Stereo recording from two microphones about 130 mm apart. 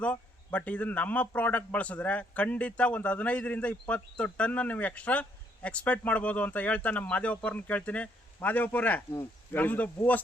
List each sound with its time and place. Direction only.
0.0 s a man's voice: 10° left (ahead or behind)